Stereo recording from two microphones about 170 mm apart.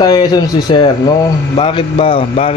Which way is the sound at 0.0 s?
25° left (ahead or behind).